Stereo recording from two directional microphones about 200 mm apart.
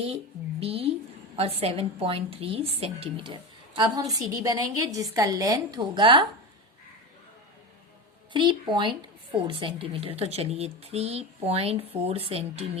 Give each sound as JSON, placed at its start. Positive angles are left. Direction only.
{"t": 0.6, "sound": "speech", "side_deg": -30}
{"t": 3.8, "sound": "a woman's voice", "side_deg": -20}
{"t": 8.3, "sound": "speech", "side_deg": -25}